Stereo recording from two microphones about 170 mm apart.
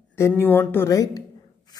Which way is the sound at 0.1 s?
15° left (ahead or behind).